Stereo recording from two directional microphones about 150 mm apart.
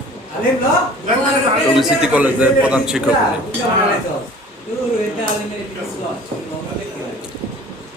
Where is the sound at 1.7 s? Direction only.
10° right (ahead or behind).